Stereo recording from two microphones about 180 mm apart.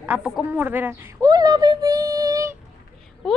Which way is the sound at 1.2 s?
20° right (ahead or behind).